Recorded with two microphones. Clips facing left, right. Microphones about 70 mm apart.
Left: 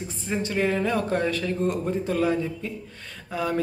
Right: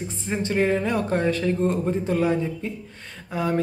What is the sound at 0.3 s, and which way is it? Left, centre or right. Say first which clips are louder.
Speech: right 3 dB; right.